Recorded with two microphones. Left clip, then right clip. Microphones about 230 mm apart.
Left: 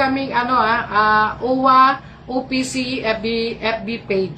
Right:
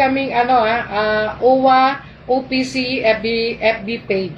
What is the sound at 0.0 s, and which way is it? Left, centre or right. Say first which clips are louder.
Speech: right 3 dB; left.